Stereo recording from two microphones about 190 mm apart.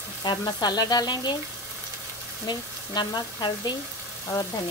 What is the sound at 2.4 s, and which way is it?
Speech, 20° left (ahead or behind).